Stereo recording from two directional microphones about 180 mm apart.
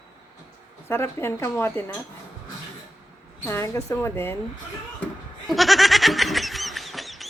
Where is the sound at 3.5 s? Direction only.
15° left (ahead or behind).